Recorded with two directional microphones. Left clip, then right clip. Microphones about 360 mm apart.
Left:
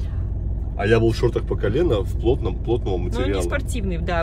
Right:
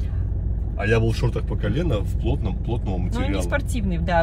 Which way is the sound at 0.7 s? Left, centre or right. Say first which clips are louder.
Left 4 dB; left.